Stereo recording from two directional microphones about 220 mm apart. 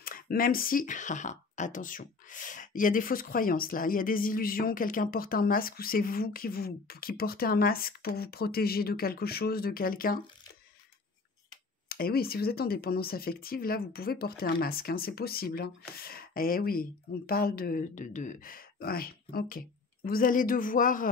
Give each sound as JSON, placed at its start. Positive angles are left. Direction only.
{"t": 0.0, "sound": "speech", "side_deg": 40}
{"t": 11.9, "sound": "speech", "side_deg": 45}